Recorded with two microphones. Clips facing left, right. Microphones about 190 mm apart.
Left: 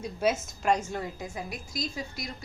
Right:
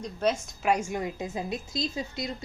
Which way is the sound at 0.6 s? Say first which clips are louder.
Right 1 dB; 10° right (ahead or behind).